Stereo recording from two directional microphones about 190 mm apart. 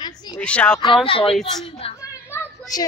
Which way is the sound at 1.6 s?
30° left (ahead or behind).